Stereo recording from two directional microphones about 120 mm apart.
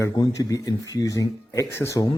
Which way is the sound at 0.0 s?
25° left (ahead or behind).